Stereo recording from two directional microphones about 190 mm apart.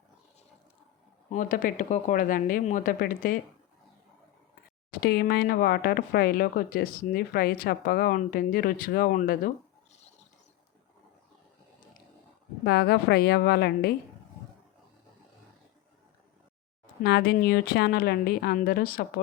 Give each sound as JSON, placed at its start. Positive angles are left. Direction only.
{"t": 1.3, "sound": "speech", "side_deg": 45}
{"t": 4.9, "sound": "speech", "side_deg": 55}
{"t": 12.6, "sound": "a woman's voice", "side_deg": 60}
{"t": 17.0, "sound": "a woman's voice", "side_deg": 60}